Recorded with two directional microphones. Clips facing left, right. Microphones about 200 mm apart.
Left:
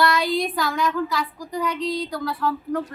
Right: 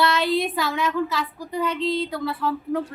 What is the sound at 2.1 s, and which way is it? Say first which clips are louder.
Speech: even; 5° right (ahead or behind).